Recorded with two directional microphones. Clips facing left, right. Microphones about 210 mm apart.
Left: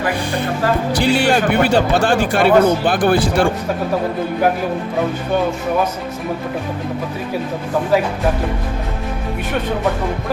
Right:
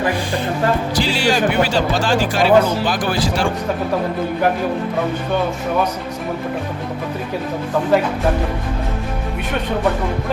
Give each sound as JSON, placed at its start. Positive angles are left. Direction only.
{"t": 1.1, "sound": "speech", "side_deg": 55}